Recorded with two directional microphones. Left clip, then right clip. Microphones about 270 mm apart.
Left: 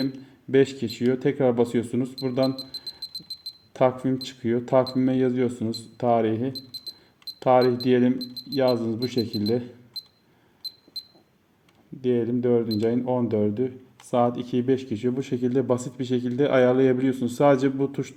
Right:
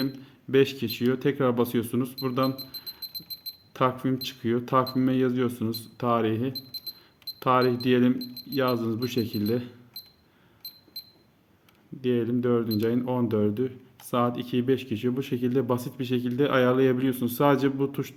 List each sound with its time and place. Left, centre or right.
0.5 s speech: centre
3.0 s a sound: right
3.7 s speech: centre
6.5 s a sound: right
7.4 s speech: centre
8.2 s speech: centre
8.5 s speech: centre
12.0 s speech: centre